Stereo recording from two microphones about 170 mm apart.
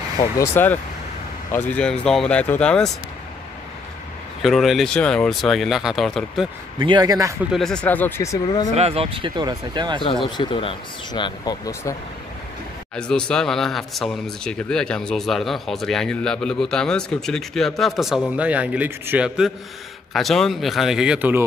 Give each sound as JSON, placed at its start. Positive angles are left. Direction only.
{"t": 0.6, "sound": "speech", "side_deg": 10}
{"t": 4.4, "sound": "speech", "side_deg": 0}
{"t": 6.8, "sound": "speech", "side_deg": -25}
{"t": 7.5, "sound": "speech", "side_deg": 5}
{"t": 8.7, "sound": "speech", "side_deg": -35}
{"t": 10.2, "sound": "speech", "side_deg": 30}
{"t": 12.9, "sound": "speech", "side_deg": 5}